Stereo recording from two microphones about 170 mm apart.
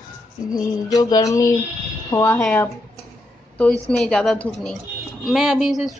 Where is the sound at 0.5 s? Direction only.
20° left (ahead or behind).